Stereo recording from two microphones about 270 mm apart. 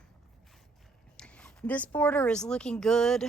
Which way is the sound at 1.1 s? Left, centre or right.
Centre.